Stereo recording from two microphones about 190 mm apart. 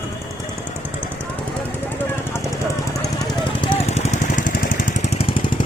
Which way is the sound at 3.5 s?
30° left (ahead or behind).